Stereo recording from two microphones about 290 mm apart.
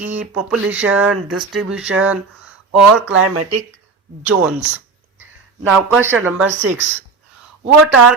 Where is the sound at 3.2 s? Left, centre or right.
Right.